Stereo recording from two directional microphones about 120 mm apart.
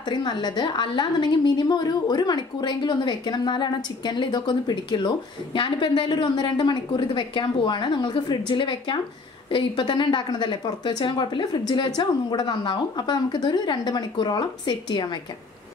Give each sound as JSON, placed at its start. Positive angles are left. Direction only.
{"t": 0.1, "sound": "a woman's voice", "side_deg": 40}